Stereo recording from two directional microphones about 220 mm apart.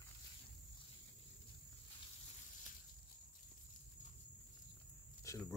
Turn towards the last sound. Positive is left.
turn(degrees=15)  # may be behind; listen again after turning